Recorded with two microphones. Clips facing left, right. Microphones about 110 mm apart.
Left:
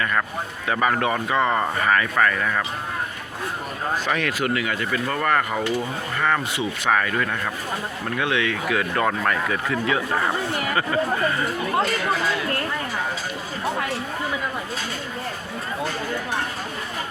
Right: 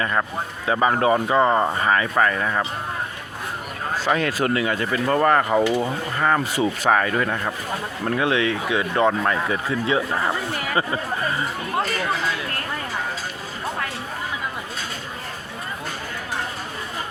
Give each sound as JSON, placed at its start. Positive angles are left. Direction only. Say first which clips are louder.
{"t": 0.0, "sound": "speech", "louder": "right 1 dB", "side_deg": -25}
{"t": 4.0, "sound": "speech", "louder": "right 6 dB", "side_deg": -30}
{"t": 8.8, "sound": "speech", "louder": "right 5 dB", "side_deg": -20}